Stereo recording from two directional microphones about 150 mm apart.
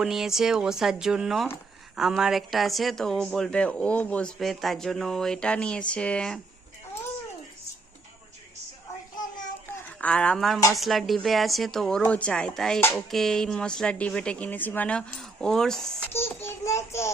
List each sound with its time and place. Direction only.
0.0 s speech: 5° right (ahead or behind)
9.6 s a sound: 10° left (ahead or behind)
10.7 s speech: centre (ahead or behind)
16.1 s child singing: 15° left (ahead or behind)